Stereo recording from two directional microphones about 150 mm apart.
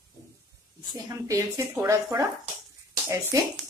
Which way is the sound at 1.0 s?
20° right (ahead or behind).